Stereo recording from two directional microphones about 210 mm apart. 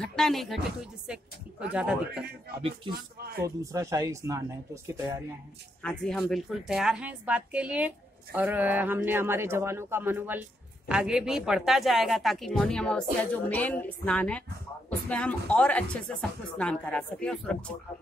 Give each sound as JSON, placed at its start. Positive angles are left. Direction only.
{"t": 0.0, "sound": "speech", "side_deg": 0}
{"t": 3.2, "sound": "a man's voice", "side_deg": -45}
{"t": 3.4, "sound": "a woman's voice", "side_deg": -15}
{"t": 5.8, "sound": "a woman's voice", "side_deg": 5}